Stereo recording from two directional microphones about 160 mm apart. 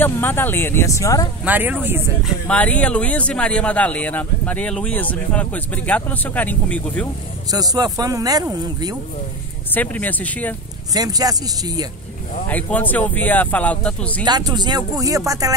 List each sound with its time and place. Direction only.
0.0 s speech: 15° left (ahead or behind)
1.4 s speech: 10° right (ahead or behind)
2.4 s speech: 10° left (ahead or behind)
7.5 s speech: 25° right (ahead or behind)
9.8 s speech: 10° left (ahead or behind)
11.0 s speech: 25° right (ahead or behind)
12.4 s speech: 10° left (ahead or behind)
14.2 s speech: 25° right (ahead or behind)